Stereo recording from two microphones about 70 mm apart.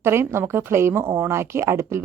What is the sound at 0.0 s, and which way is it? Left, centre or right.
Speech, right.